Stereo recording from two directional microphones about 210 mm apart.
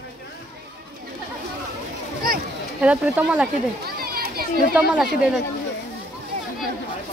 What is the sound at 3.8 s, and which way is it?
Children playing, 45° right (ahead or behind).